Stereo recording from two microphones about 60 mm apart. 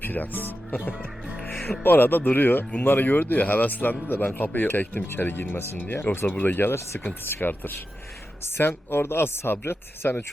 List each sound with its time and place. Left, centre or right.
0.0 s speech: left
1.5 s music: left
1.8 s speech: left